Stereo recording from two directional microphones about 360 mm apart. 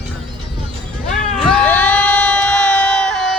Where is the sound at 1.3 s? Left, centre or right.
Centre.